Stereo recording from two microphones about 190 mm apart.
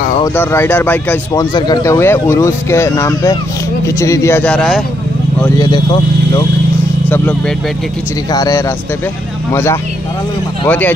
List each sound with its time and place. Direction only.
0.2 s speech: 15° left (ahead or behind)
1.4 s speech: 20° left (ahead or behind); by 4.8 s centre (ahead or behind)
5.6 s speech: 25° left (ahead or behind)
7.1 s speech: 10° left (ahead or behind)
8.3 s speech: 20° left (ahead or behind)